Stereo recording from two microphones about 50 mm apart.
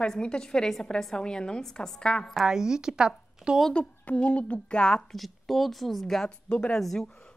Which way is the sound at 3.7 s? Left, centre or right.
Left.